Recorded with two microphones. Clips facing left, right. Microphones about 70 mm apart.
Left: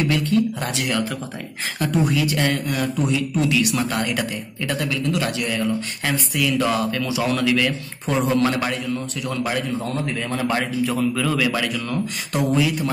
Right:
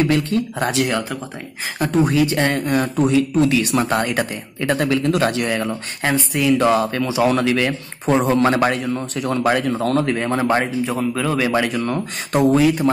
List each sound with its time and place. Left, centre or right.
0.0 s speech: right
9.8 s a man's voice: right
10.4 s speech: right